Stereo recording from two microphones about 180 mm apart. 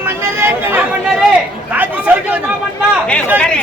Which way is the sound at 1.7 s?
10° right (ahead or behind).